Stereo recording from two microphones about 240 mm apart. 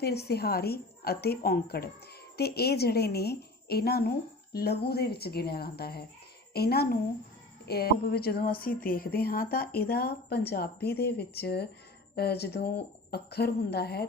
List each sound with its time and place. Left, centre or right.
0.0 s a woman's voice: left